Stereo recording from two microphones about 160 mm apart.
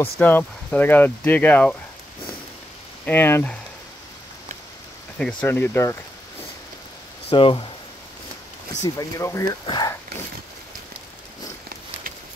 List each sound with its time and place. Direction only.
0.0 s speech: 10° left (ahead or behind)
3.1 s speech: 15° left (ahead or behind)
5.2 s speech: 10° left (ahead or behind)
7.2 s speech: 35° left (ahead or behind)
8.8 s speech: 20° left (ahead or behind)